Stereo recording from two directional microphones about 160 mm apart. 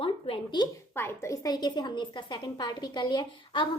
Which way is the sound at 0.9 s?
15° left (ahead or behind).